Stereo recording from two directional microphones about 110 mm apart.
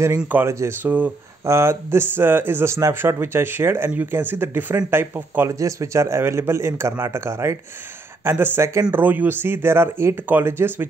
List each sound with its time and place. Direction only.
0.2 s speech: 15° right (ahead or behind)
5.5 s speech: 30° right (ahead or behind)